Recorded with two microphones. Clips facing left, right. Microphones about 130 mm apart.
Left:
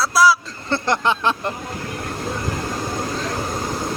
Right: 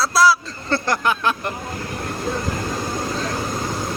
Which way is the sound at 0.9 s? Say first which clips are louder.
Left 2 dB; 25° left (ahead or behind).